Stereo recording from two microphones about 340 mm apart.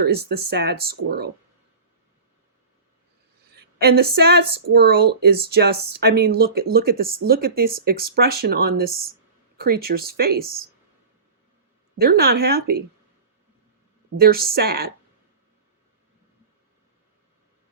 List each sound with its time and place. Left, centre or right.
0.0 s speech: right
3.5 s a woman's voice: right
11.9 s speech: right
14.2 s speech: right